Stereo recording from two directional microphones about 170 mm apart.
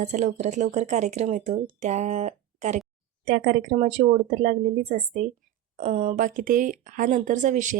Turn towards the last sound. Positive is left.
turn(degrees=-50)  # may be behind; listen again after turning